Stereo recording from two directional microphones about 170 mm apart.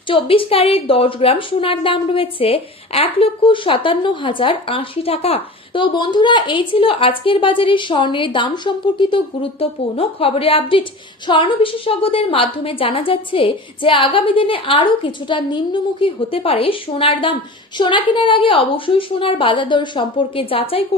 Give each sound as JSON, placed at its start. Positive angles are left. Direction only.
{"t": 0.1, "sound": "a woman's voice", "side_deg": 35}